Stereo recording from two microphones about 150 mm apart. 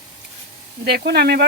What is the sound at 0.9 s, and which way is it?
Speech, 90° right.